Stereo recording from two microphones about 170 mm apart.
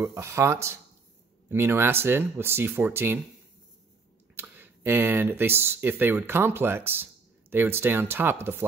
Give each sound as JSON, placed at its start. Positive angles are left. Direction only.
{"t": 0.0, "sound": "speech", "side_deg": -15}
{"t": 4.4, "sound": "speech", "side_deg": -10}